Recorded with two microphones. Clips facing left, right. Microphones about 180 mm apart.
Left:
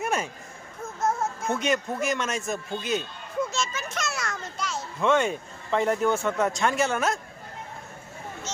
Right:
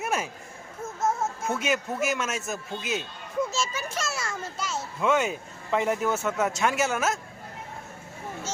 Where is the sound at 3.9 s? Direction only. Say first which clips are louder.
Even; 30° right (ahead or behind).